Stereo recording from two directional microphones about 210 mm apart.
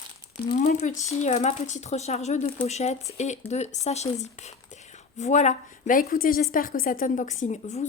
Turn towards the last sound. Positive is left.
turn(degrees=35)  # may be behind; listen again after turning